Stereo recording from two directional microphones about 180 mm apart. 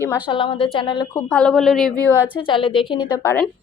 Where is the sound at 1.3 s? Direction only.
5° left (ahead or behind).